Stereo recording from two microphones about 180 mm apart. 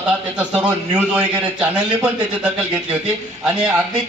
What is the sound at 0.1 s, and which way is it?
A man's voice, 5° right (ahead or behind).